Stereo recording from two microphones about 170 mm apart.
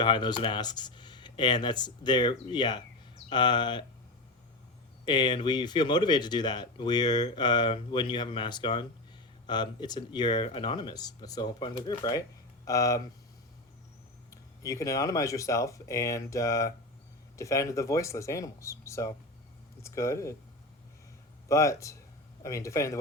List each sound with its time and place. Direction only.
0.0 s speech: 25° left (ahead or behind)
5.0 s speech: 25° left (ahead or behind)
14.3 s speech: 20° left (ahead or behind)
21.5 s speech: 15° left (ahead or behind)